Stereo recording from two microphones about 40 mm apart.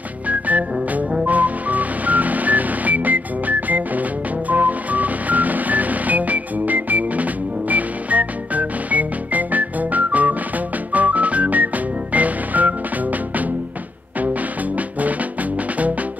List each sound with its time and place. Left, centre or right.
0.3 s music: right